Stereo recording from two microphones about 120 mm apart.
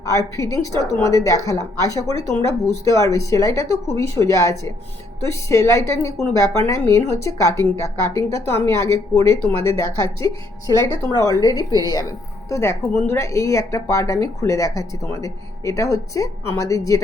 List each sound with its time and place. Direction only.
0.0 s a woman's voice: 25° left (ahead or behind)
11.1 s a woman's voice: 30° left (ahead or behind)